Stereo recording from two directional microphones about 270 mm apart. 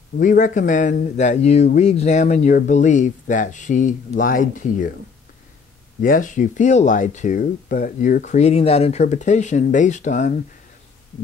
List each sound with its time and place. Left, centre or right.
0.2 s speech: left
5.9 s speech: left